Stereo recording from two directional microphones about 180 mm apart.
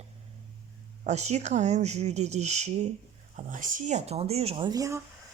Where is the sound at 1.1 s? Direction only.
40° right (ahead or behind); by 5.0 s 20° right (ahead or behind).